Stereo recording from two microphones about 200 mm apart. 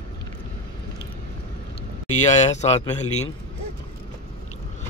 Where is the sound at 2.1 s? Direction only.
35° left (ahead or behind).